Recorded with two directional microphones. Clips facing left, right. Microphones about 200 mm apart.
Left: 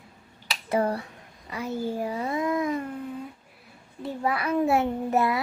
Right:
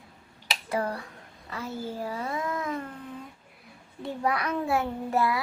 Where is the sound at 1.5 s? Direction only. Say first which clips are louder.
Left 5 dB; 15° left (ahead or behind).